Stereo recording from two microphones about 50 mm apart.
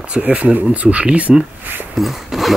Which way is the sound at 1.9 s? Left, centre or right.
Centre.